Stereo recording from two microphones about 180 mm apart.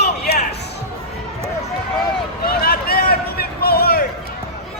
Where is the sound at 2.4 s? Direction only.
55° left (ahead or behind).